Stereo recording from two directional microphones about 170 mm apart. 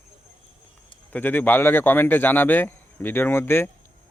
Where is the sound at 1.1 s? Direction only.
10° left (ahead or behind).